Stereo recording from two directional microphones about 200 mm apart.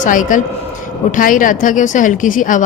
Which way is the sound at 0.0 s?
40° left (ahead or behind).